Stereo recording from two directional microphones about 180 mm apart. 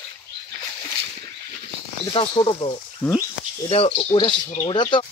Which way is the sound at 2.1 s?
25° left (ahead or behind).